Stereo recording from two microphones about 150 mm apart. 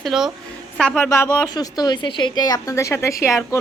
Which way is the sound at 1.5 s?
25° left (ahead or behind).